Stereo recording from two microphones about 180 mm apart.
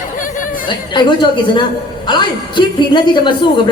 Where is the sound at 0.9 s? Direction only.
25° left (ahead or behind).